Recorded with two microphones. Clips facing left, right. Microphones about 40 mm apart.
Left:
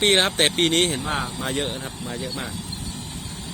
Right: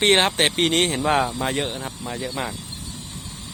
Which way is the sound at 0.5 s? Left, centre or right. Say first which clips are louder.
Even; centre.